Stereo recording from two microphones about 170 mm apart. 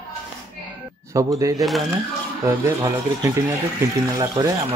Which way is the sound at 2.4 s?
20° right (ahead or behind).